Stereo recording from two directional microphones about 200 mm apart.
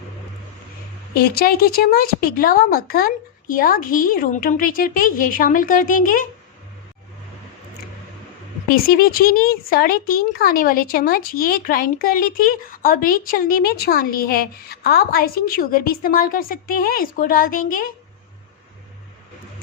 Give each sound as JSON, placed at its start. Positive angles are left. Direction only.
{"t": 1.1, "sound": "speech", "side_deg": 50}
{"t": 8.7, "sound": "speech", "side_deg": 45}